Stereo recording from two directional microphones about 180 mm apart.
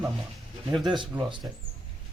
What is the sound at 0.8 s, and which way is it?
Speech, 25° right (ahead or behind).